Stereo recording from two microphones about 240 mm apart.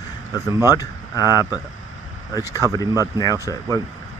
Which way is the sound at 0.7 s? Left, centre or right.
Centre.